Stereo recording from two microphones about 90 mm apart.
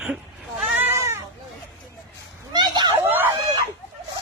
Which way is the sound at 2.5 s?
55° right (ahead or behind).